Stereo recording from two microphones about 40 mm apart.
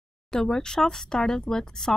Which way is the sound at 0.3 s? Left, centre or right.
Centre.